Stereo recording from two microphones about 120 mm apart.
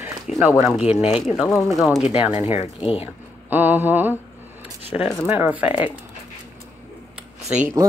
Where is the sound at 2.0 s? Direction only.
55° left (ahead or behind).